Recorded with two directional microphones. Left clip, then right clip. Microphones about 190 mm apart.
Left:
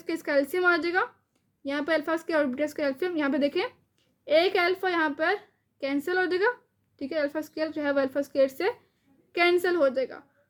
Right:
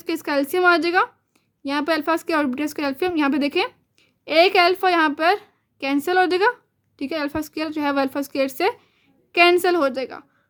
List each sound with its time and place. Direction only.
0.0 s a woman's voice: 35° right (ahead or behind)